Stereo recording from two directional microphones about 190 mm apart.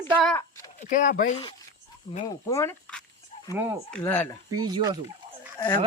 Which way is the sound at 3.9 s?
5° left (ahead or behind).